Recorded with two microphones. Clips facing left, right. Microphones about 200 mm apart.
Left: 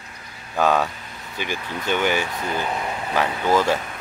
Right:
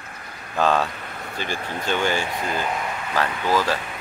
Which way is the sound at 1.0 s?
60° right (ahead or behind).